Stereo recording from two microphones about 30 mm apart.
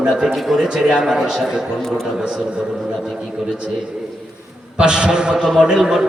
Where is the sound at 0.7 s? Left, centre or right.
Centre.